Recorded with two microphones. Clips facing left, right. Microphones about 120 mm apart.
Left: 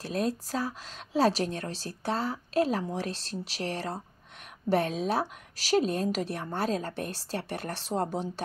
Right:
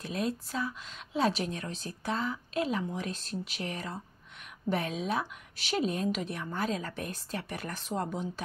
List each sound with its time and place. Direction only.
0.0 s speech: 40° left (ahead or behind)